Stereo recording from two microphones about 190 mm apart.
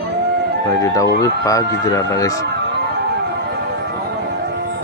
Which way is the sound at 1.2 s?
15° left (ahead or behind).